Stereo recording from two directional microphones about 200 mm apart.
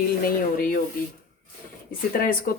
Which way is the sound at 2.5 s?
45° left (ahead or behind).